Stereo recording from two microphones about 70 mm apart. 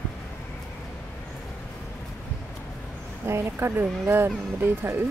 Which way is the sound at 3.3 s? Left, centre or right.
Right.